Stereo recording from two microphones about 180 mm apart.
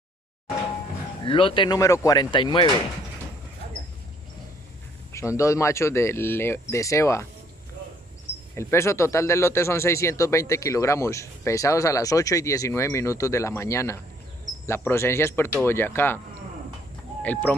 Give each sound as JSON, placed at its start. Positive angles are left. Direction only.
{"t": 1.2, "sound": "speech", "side_deg": 30}
{"t": 5.1, "sound": "speech", "side_deg": 15}
{"t": 8.5, "sound": "speech", "side_deg": 15}
{"t": 17.2, "sound": "speech", "side_deg": 10}